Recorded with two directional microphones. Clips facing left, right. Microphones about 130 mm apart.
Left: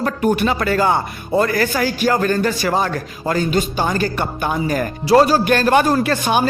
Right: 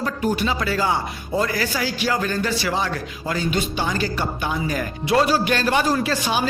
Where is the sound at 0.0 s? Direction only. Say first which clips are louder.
Left 5 dB; 60° left (ahead or behind).